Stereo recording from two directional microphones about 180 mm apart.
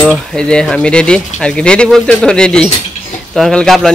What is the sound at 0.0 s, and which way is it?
Speech, centre (ahead or behind).